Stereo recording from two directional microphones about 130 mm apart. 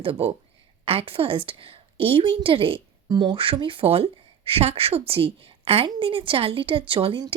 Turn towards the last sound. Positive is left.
turn(degrees=-40)  # may be behind; listen again after turning